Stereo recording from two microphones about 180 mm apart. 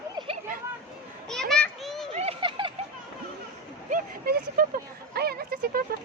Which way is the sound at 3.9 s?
50° right (ahead or behind).